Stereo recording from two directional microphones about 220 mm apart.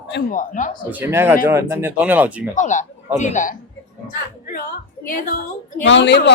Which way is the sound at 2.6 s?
35° left (ahead or behind).